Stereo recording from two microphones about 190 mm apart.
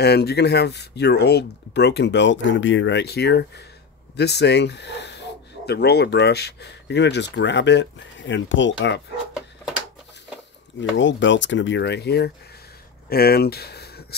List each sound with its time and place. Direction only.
0.0 s speech: 60° left (ahead or behind); by 9.0 s 75° left (ahead or behind)
10.8 s speech: 75° left (ahead or behind); by 14.0 s 55° left (ahead or behind)